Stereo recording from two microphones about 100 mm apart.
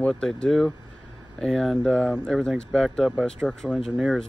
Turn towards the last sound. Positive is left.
turn(degrees=-10)  # may be behind; listen again after turning